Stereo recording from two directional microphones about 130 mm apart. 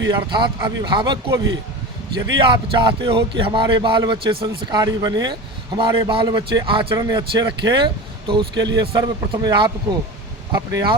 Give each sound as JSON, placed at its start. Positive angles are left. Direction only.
{"t": 0.1, "sound": "speech", "side_deg": -35}
{"t": 7.0, "sound": "speech", "side_deg": -30}